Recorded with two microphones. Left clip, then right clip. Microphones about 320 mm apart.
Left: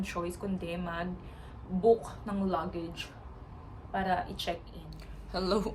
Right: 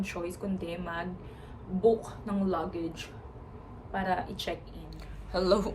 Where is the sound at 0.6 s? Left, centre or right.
Centre.